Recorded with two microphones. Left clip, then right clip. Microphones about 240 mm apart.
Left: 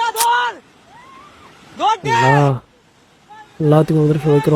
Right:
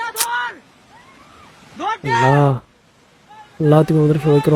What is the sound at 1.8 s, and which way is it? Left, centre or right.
Speech, centre.